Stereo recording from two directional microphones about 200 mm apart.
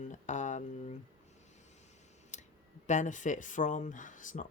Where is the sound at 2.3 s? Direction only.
35° left (ahead or behind).